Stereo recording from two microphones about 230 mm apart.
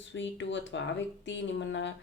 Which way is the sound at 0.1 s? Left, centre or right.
Left.